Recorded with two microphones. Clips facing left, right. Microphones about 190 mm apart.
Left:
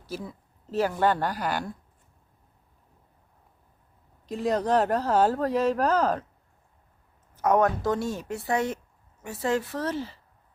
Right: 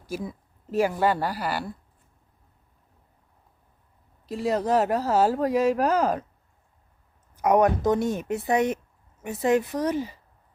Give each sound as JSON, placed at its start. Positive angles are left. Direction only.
{"t": 0.0, "sound": "speech", "side_deg": -10}
{"t": 4.3, "sound": "speech", "side_deg": -5}
{"t": 7.3, "sound": "speech", "side_deg": -15}